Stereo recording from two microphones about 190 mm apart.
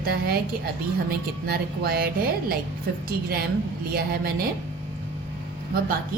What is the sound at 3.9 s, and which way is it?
Speech, 55° right (ahead or behind).